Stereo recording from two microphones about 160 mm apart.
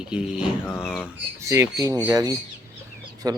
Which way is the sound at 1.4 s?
20° right (ahead or behind).